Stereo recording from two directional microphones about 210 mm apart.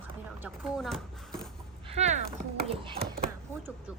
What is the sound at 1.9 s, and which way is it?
Speech, 30° right (ahead or behind).